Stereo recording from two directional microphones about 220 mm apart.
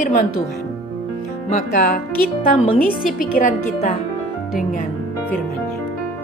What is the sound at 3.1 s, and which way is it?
Speech, 35° left (ahead or behind).